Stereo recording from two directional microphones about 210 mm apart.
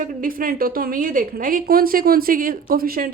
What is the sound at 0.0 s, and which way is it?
A woman's voice, 40° right (ahead or behind).